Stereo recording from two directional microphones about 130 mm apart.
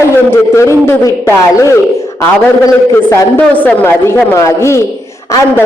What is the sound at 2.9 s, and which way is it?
A man's voice, 15° left (ahead or behind).